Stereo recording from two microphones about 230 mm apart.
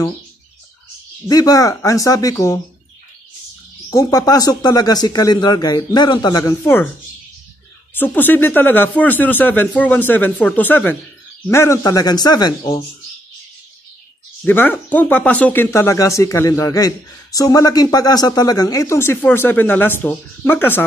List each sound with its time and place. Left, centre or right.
1.2 s speech: centre
3.9 s speech: centre
7.9 s speech: centre
14.4 s speech: centre